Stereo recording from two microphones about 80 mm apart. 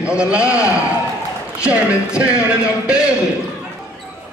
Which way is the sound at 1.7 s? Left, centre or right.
Centre.